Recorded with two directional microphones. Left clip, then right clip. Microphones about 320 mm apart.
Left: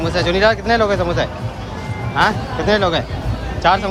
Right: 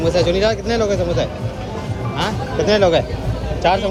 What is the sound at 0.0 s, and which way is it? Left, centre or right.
Speech, centre.